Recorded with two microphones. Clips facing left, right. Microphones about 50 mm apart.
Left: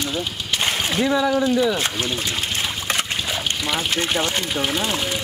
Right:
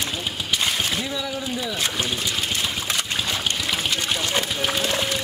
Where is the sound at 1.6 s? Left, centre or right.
Left.